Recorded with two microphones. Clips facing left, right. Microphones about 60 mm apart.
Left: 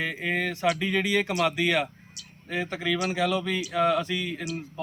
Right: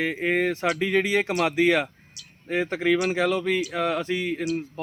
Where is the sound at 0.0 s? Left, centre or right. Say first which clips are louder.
Right 5 dB; right.